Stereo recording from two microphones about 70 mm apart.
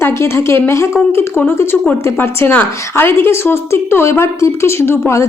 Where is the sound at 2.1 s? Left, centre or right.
Left.